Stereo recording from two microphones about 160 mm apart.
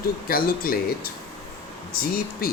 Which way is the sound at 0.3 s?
65° left (ahead or behind).